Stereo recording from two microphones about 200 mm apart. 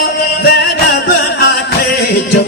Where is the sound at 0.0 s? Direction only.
50° left (ahead or behind).